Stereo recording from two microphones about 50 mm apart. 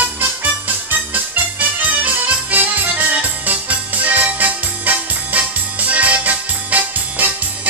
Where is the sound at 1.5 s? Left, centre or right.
Right.